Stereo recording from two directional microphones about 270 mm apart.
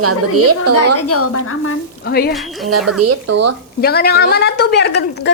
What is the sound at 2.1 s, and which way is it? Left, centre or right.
Speech, left.